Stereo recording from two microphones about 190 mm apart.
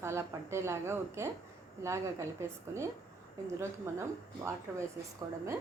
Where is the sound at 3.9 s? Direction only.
15° right (ahead or behind).